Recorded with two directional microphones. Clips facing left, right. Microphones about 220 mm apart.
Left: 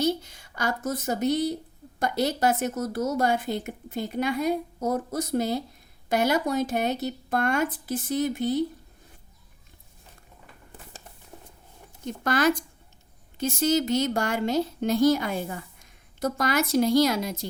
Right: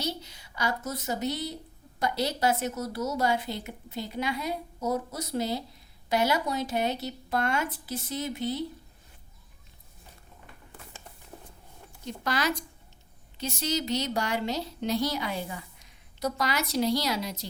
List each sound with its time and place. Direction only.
0.0 s a woman's voice: 50° left (ahead or behind)
12.0 s a woman's voice: 50° left (ahead or behind)